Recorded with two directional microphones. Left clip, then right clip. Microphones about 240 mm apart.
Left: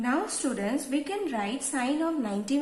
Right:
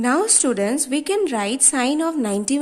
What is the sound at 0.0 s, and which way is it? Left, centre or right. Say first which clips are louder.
A woman's voice: right 10 dB; right.